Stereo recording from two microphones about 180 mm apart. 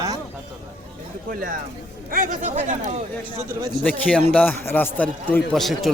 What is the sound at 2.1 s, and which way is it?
Speech, 45° right (ahead or behind).